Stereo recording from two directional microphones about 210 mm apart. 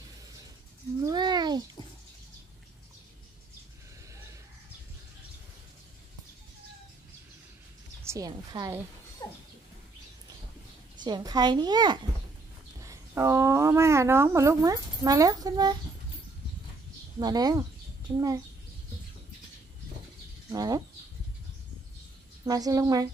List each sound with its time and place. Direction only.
1.0 s a sound: 20° right (ahead or behind)
8.0 s speech: 15° right (ahead or behind)
11.0 s a woman's voice: 20° right (ahead or behind)
17.2 s speech: 20° right (ahead or behind)
20.5 s speech: 15° right (ahead or behind)
22.4 s speech: 15° right (ahead or behind)